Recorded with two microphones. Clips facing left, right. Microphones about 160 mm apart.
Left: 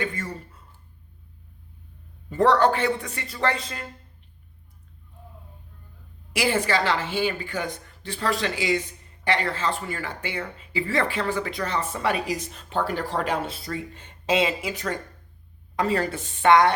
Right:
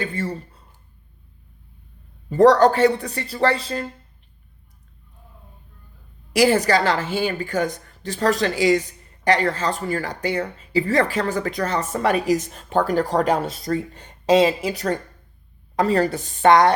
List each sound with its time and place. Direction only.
0.0 s a sound: 30° right (ahead or behind)
2.3 s speech: 40° right (ahead or behind)
6.3 s speech: 40° right (ahead or behind)